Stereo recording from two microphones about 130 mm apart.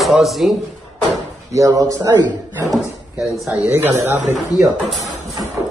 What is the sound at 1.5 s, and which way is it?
Speech, 25° right (ahead or behind).